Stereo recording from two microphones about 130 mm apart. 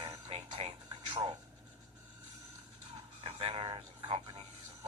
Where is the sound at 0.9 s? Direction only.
35° right (ahead or behind).